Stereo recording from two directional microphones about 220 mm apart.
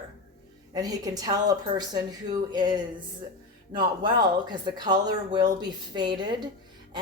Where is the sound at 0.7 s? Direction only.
15° right (ahead or behind).